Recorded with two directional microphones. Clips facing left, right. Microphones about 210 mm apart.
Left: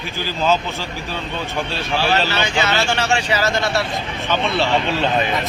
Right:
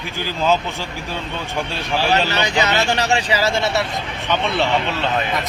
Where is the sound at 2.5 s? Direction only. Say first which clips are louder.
Right 2 dB; 20° right (ahead or behind).